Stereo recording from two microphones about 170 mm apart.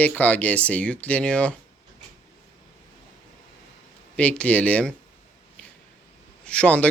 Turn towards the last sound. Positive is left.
turn(degrees=5)  # may be behind; listen again after turning